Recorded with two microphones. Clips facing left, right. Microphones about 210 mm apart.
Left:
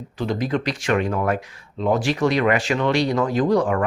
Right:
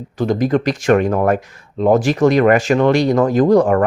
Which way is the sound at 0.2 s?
45° right (ahead or behind).